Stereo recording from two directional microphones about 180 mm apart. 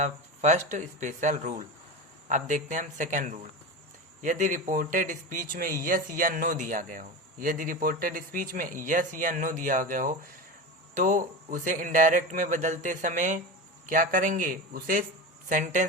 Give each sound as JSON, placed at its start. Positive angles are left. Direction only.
{"t": 0.0, "sound": "speech", "side_deg": -40}